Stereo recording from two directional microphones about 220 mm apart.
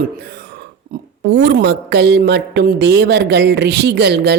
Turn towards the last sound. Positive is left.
turn(degrees=-50)  # may be behind; listen again after turning